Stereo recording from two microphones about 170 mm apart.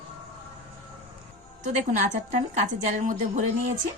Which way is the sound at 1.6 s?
45° right (ahead or behind).